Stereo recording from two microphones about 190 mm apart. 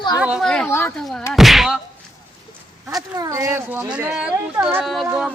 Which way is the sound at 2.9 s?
20° right (ahead or behind).